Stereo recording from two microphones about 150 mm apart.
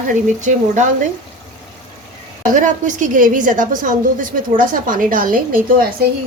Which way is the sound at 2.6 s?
55° right (ahead or behind).